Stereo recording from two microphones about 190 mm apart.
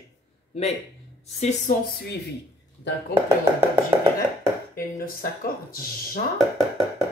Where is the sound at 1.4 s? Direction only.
35° left (ahead or behind).